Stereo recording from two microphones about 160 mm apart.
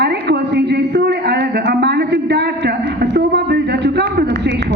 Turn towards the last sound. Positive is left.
turn(degrees=-90)